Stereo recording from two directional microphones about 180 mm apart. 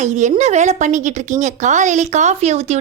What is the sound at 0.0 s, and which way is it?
A woman's voice, 40° right (ahead or behind).